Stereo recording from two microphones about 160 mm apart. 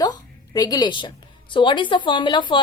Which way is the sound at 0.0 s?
25° left (ahead or behind).